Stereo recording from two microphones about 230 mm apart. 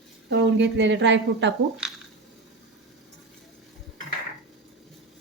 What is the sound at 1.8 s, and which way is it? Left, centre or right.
Squish, centre.